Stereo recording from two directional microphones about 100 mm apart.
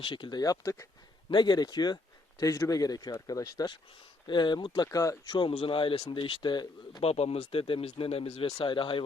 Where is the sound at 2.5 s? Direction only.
35° left (ahead or behind).